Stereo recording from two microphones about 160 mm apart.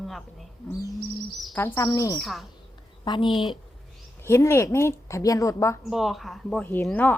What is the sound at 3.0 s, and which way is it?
Speech, 30° left (ahead or behind).